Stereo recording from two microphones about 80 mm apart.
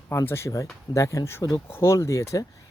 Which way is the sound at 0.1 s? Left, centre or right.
Left.